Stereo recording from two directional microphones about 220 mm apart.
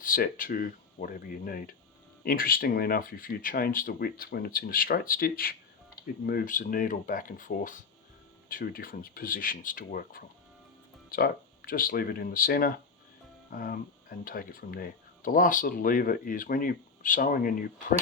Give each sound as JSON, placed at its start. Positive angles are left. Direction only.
{"t": 0.0, "sound": "speech", "side_deg": 40}